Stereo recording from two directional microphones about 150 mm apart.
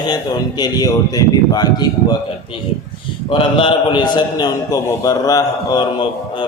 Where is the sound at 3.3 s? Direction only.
35° left (ahead or behind).